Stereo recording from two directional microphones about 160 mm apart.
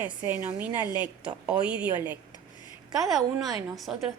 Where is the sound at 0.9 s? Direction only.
10° right (ahead or behind).